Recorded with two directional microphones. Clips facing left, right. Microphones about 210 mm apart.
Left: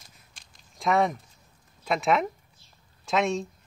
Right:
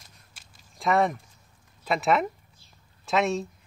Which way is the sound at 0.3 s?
5° right (ahead or behind).